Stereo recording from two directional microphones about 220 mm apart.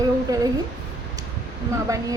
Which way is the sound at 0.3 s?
15° right (ahead or behind).